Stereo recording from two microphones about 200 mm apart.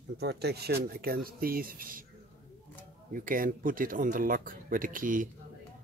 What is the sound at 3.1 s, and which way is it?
Speech, 45° right (ahead or behind).